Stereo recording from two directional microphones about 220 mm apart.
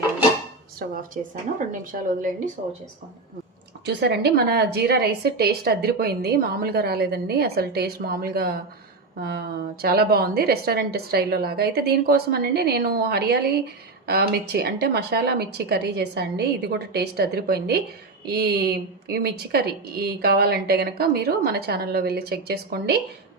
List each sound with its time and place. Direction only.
0.8 s a woman's voice: 40° right (ahead or behind)
3.8 s a woman's voice: 50° right (ahead or behind)